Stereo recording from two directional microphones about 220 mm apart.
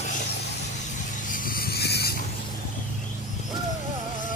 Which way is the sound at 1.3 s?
40° left (ahead or behind).